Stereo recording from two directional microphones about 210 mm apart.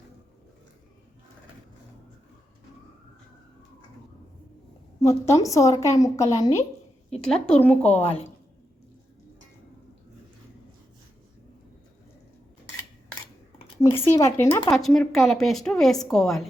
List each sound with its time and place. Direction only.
4.9 s a woman's voice: 15° left (ahead or behind)
7.3 s a woman's voice: 5° left (ahead or behind)
8.0 s speech: 30° left (ahead or behind)
13.8 s a woman's voice: 15° left (ahead or behind)
14.7 s a woman's voice: centre (ahead or behind)